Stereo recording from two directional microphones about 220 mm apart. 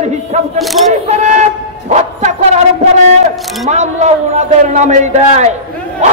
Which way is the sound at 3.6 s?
30° right (ahead or behind).